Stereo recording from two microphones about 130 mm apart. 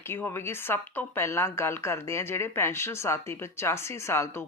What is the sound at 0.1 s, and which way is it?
A woman's voice, 15° left (ahead or behind).